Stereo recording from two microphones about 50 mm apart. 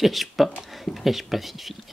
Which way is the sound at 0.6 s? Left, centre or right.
Centre.